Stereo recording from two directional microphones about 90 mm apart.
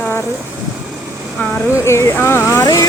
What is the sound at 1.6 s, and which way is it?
Speech, 30° left (ahead or behind).